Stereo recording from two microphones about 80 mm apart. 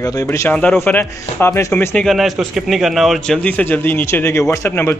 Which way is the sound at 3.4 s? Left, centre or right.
Centre.